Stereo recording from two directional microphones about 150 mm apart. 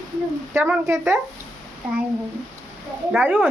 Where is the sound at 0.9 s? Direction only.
15° right (ahead or behind).